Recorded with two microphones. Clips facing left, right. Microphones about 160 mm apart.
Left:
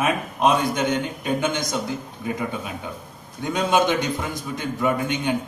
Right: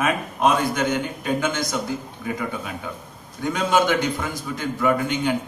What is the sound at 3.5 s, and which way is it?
A man's voice, 20° left (ahead or behind).